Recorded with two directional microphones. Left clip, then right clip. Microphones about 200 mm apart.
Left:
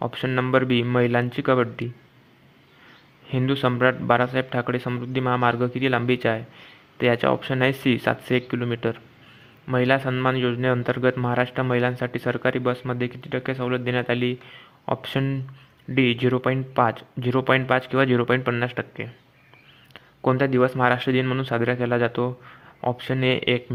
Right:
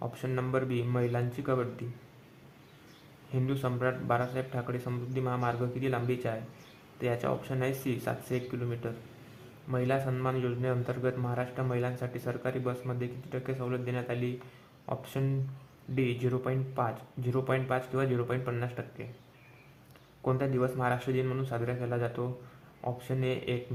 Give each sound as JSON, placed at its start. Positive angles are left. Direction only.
{"t": 0.0, "sound": "a man's voice", "side_deg": 35}
{"t": 3.3, "sound": "a man's voice", "side_deg": 40}